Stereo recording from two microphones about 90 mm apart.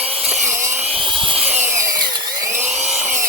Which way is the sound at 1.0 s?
5° left (ahead or behind).